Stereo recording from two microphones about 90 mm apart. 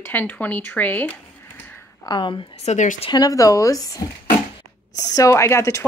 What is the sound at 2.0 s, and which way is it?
Speech, 55° left (ahead or behind).